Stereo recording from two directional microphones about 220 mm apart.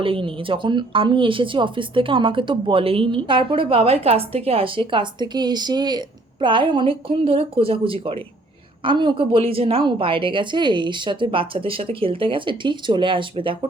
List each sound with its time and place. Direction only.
0.0 s a woman's voice: 25° right (ahead or behind)